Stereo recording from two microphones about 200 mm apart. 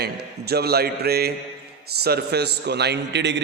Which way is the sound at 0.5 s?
50° right (ahead or behind).